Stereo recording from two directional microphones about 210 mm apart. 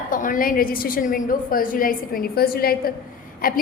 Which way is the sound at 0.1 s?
40° left (ahead or behind).